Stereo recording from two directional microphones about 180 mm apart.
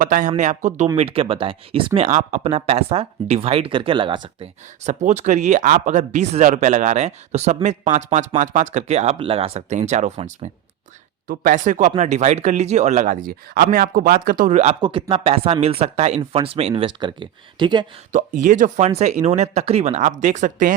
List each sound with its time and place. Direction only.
0.0 s speech: 45° right (ahead or behind)
0.9 s speech: 30° right (ahead or behind)
4.8 s speech: 40° right (ahead or behind)
14.8 s speech: 25° right (ahead or behind)
18.1 s speech: 45° right (ahead or behind)